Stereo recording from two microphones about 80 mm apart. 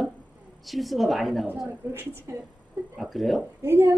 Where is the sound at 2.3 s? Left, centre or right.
Right.